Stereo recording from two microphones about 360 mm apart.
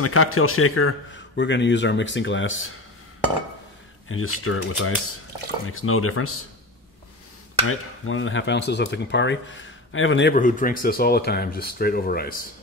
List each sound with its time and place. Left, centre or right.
0.0 s speech: left
4.1 s speech: left
7.6 s speech: left